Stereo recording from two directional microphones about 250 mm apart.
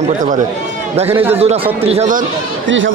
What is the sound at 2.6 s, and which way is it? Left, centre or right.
Speech, right.